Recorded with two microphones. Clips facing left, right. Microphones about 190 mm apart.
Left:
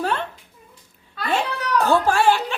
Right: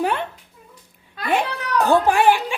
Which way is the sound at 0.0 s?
15° right (ahead or behind).